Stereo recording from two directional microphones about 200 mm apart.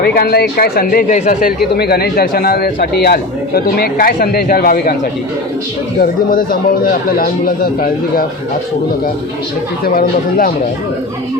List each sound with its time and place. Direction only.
0.0 s a man's voice: 55° left (ahead or behind)
6.0 s a man's voice: 45° left (ahead or behind)
9.8 s a man's voice: 45° left (ahead or behind)